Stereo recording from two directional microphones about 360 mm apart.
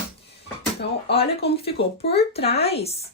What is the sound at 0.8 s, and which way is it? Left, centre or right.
Speech, left.